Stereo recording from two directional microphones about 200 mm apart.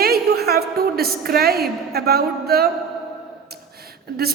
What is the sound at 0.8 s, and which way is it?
Speech, 50° right (ahead or behind).